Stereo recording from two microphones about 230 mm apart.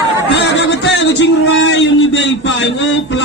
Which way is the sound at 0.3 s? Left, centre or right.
Left.